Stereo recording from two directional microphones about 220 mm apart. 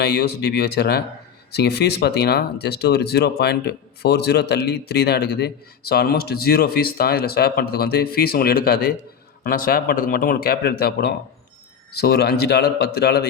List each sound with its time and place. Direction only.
0.0 s speech: 45° left (ahead or behind)